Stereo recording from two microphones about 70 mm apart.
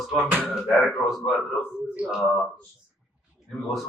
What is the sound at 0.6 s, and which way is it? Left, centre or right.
Speech, centre.